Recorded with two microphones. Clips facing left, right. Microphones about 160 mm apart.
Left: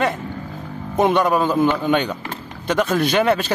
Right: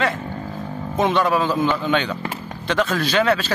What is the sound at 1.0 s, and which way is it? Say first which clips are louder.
Speech: left 2 dB; 10° left (ahead or behind).